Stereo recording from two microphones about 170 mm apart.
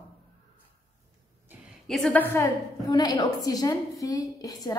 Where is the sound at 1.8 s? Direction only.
Centre (ahead or behind).